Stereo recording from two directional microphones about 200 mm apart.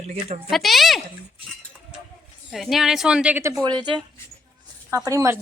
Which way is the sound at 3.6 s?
20° right (ahead or behind).